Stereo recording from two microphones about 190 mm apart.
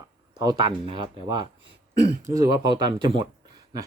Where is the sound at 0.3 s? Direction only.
20° right (ahead or behind).